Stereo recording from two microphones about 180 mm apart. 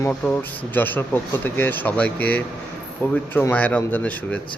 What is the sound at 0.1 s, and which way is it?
Speech, 10° left (ahead or behind).